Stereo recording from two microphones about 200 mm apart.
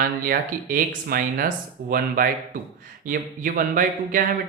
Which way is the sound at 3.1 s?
45° right (ahead or behind).